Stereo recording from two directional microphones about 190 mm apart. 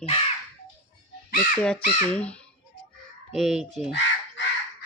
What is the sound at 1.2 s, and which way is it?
Speech, 45° left (ahead or behind).